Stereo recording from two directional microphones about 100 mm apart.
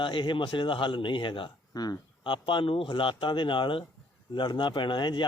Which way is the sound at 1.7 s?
40° left (ahead or behind).